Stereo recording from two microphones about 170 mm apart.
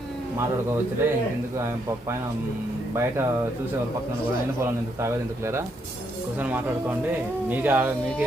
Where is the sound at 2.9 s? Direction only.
15° right (ahead or behind).